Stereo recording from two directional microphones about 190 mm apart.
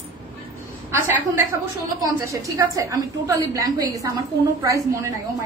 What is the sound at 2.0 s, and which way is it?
A woman's voice, 15° right (ahead or behind).